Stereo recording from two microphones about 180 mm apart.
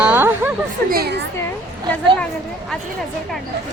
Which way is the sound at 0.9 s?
60° right (ahead or behind).